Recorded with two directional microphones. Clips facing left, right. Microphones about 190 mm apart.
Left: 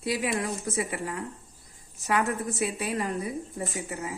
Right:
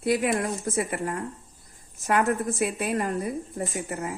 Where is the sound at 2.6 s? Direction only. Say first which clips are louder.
Right 2 dB; 55° right (ahead or behind).